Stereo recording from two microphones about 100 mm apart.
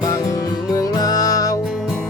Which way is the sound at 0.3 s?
35° left (ahead or behind).